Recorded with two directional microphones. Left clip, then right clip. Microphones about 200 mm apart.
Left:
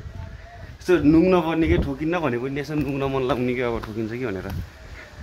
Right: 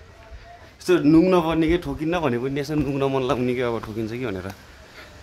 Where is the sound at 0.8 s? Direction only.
15° right (ahead or behind).